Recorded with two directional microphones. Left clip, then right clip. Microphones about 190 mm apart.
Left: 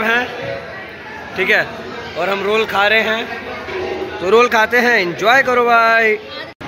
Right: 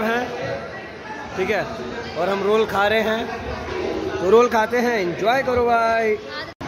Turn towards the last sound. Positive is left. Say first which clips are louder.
# left 6 dB
turn(degrees=0)  # may be behind; listen again after turning